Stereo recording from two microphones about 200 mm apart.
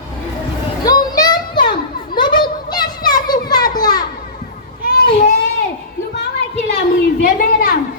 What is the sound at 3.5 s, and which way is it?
Children playing, 20° left (ahead or behind).